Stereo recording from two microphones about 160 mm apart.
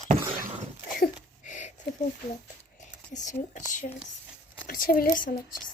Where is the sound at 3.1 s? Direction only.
50° left (ahead or behind).